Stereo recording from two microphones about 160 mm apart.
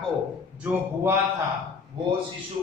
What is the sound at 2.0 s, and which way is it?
Speech, 30° right (ahead or behind).